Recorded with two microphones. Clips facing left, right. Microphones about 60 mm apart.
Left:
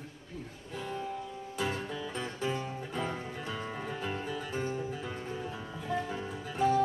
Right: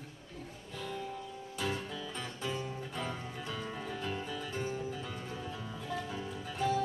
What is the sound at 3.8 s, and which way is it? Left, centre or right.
Music, centre.